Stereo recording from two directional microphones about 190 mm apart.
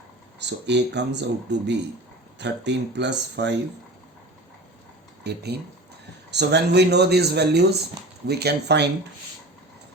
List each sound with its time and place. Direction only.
0.3 s speech: 65° right (ahead or behind)
5.2 s speech: 60° right (ahead or behind)